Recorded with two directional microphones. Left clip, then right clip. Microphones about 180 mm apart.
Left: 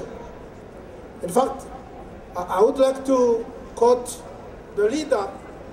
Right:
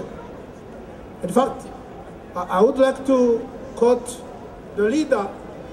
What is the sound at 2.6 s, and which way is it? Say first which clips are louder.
Speech: right 1 dB; 25° left (ahead or behind).